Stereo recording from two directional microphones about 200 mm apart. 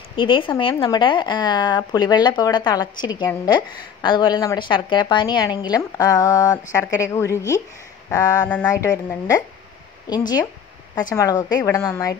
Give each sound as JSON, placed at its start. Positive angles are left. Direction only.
{"t": 0.1, "sound": "a woman's voice", "side_deg": 25}